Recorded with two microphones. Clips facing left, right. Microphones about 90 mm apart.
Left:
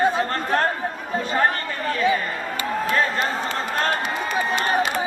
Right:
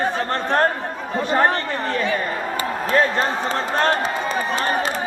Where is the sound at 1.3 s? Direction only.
30° right (ahead or behind).